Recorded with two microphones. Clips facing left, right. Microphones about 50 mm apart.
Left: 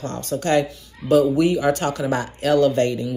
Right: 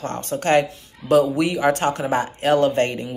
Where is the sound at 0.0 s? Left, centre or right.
Right.